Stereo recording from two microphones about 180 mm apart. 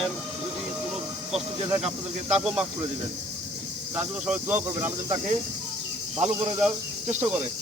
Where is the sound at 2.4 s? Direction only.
5° right (ahead or behind).